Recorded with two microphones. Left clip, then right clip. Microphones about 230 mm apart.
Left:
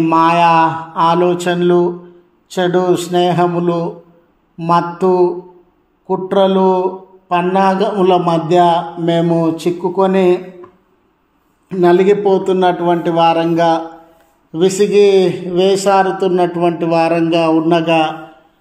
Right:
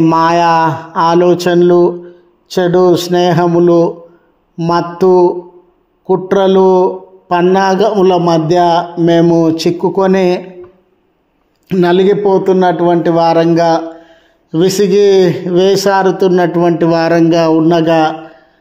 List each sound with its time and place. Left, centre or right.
0.0 s speech: right
11.7 s speech: right